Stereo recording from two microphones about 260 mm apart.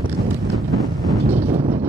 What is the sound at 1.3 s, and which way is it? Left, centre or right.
Wind noise, right.